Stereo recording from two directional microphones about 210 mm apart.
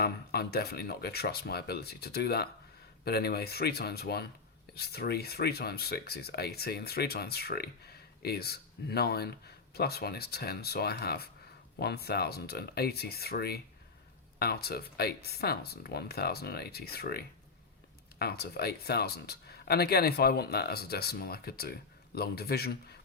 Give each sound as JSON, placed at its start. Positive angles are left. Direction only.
{"t": 0.0, "sound": "speech", "side_deg": 50}